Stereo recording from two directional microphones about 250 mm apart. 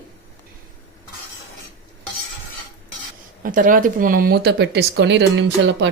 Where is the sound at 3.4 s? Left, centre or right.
Right.